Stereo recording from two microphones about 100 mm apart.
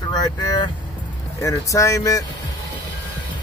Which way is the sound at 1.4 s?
35° left (ahead or behind).